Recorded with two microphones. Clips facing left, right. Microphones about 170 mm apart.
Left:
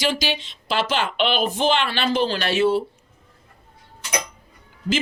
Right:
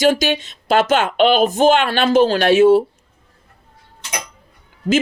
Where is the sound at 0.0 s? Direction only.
50° right (ahead or behind).